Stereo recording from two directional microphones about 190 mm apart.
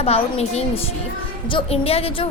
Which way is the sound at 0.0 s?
30° left (ahead or behind).